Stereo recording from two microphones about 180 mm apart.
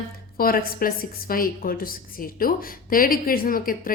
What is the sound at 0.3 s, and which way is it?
A woman's voice, 55° left (ahead or behind).